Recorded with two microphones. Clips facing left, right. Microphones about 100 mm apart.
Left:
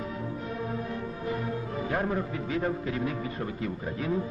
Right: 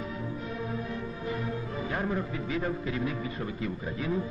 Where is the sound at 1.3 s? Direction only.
50° left (ahead or behind).